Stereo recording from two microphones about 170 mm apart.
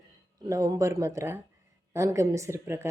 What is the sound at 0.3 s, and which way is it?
Speech, 20° right (ahead or behind).